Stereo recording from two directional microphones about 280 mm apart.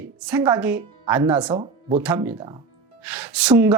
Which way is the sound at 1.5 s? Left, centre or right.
Centre.